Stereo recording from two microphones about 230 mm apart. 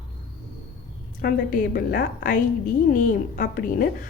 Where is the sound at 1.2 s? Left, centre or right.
Left.